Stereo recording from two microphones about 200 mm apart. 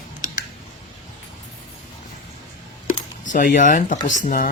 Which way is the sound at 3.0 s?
40° left (ahead or behind).